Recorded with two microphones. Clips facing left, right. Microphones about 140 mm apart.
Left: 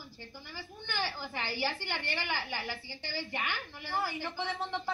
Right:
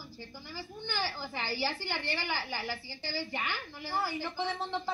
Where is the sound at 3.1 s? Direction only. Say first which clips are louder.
Even; 15° left (ahead or behind).